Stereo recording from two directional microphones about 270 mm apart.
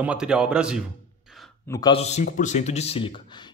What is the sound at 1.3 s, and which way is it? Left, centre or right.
A man's voice, centre.